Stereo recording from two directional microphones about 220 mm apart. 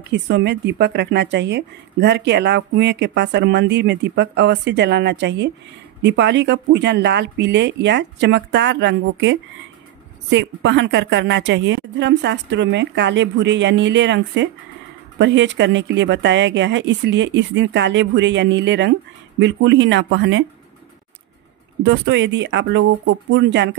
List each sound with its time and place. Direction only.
0.1 s a woman's voice: 50° right (ahead or behind)
21.8 s a woman's voice: 55° right (ahead or behind)